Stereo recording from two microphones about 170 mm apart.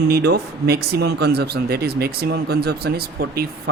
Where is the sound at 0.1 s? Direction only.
70° right (ahead or behind).